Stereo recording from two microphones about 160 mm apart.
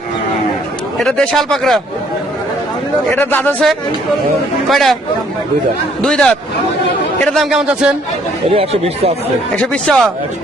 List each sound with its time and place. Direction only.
0.9 s a man's voice: 5° left (ahead or behind)
3.1 s speech: 10° left (ahead or behind)
4.7 s a man's voice: centre (ahead or behind)
6.0 s a man's voice: 5° left (ahead or behind)
8.5 s speech: 40° right (ahead or behind)
9.6 s a man's voice: 5° left (ahead or behind)